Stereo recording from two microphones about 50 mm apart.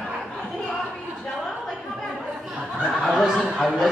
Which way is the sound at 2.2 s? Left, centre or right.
Centre.